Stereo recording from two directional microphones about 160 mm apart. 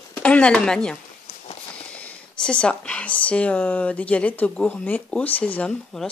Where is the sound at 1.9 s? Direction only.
5° left (ahead or behind).